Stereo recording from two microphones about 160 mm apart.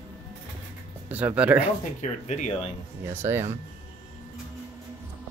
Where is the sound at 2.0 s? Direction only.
45° left (ahead or behind).